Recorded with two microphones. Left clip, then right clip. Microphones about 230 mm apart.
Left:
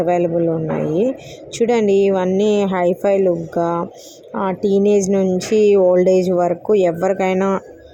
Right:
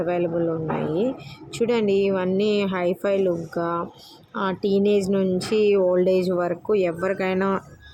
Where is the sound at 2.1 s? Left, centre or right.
Centre.